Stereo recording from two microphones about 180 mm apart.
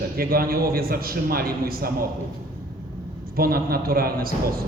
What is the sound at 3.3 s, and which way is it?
A man's voice, 55° right (ahead or behind).